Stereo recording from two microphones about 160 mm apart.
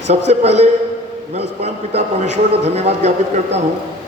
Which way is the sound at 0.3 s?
45° right (ahead or behind).